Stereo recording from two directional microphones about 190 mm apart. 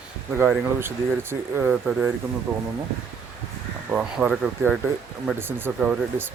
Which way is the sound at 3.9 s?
5° right (ahead or behind).